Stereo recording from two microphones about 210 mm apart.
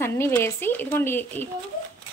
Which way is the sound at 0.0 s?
10° left (ahead or behind).